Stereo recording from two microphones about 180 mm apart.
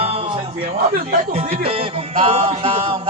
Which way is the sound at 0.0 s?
35° right (ahead or behind).